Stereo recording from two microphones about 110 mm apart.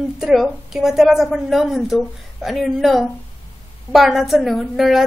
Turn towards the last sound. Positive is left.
turn(degrees=0)  # may be behind; listen again after turning